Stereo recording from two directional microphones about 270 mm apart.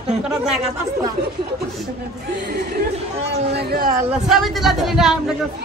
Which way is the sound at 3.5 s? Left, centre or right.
Right.